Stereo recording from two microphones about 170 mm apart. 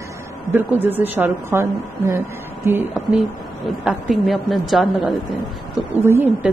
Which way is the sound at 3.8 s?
Centre (ahead or behind).